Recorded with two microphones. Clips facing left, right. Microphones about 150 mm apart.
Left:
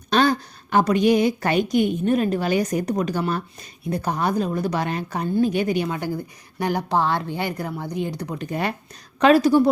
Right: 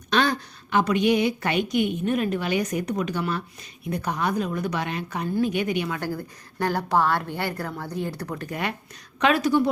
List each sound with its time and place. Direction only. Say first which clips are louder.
0.1 s a woman's voice: left 4 dB; 35° left (ahead or behind)
6.0 s speech: left 2 dB; 15° left (ahead or behind)
9.2 s a woman's voice: left 5 dB; 35° left (ahead or behind)